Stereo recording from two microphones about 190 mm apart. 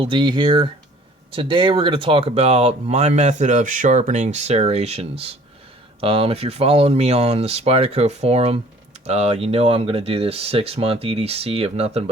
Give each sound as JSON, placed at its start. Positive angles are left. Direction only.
{"t": 0.0, "sound": "speech", "side_deg": -25}